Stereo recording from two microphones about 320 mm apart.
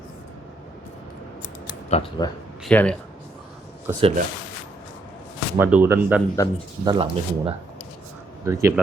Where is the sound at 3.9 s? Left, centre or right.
Centre.